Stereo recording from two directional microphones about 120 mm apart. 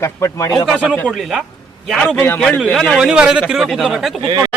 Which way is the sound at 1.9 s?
5° left (ahead or behind).